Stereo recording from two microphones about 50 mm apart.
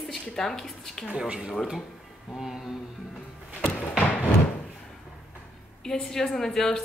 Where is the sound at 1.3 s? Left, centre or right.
Centre.